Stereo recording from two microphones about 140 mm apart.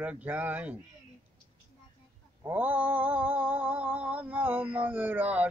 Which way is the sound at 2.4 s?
10° right (ahead or behind).